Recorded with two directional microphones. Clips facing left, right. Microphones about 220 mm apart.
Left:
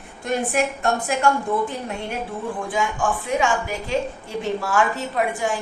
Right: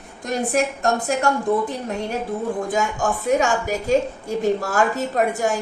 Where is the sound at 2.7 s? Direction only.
40° right (ahead or behind).